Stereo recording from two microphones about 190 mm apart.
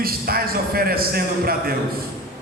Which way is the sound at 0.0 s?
50° right (ahead or behind).